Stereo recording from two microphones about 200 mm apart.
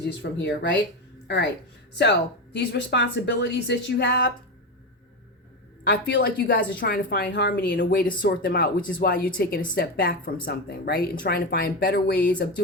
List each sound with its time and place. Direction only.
0.0 s speech: 55° left (ahead or behind)
2.0 s speech: 60° left (ahead or behind)
5.9 s speech: 65° left (ahead or behind)
6.6 s speech: 50° left (ahead or behind)